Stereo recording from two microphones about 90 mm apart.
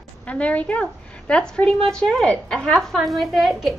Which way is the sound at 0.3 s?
15° left (ahead or behind).